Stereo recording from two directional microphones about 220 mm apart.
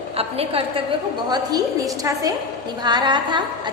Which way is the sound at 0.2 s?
25° right (ahead or behind).